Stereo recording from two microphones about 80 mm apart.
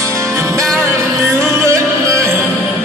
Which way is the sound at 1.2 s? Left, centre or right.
Right.